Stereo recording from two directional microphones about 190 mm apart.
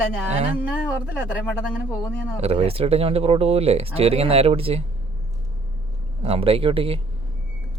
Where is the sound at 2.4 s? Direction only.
35° right (ahead or behind).